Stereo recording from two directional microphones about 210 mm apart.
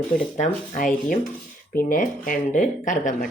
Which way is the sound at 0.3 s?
35° left (ahead or behind).